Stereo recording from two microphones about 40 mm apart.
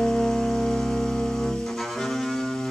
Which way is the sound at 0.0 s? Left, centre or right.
Centre.